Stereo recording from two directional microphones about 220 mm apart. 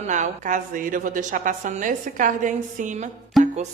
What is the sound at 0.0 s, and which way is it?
A woman's voice, 35° right (ahead or behind).